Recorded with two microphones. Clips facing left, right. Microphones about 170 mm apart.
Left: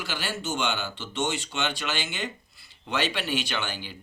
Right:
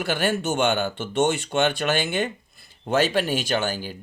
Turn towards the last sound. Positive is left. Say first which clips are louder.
# right 8 dB
turn(degrees=-45)  # may be behind; listen again after turning